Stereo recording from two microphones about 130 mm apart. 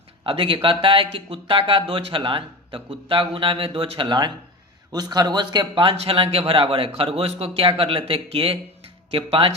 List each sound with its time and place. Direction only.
0.3 s speech: 45° right (ahead or behind)